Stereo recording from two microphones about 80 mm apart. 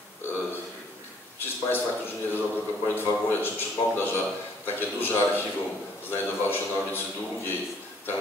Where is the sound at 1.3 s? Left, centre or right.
Left.